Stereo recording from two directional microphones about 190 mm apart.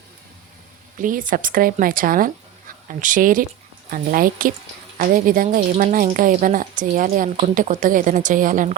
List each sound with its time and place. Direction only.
1.0 s speech: 45° right (ahead or behind)